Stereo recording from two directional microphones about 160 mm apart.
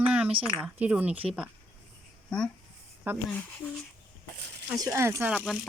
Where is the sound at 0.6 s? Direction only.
10° right (ahead or behind).